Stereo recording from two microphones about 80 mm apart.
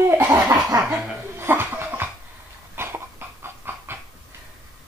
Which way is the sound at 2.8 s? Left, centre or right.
Right.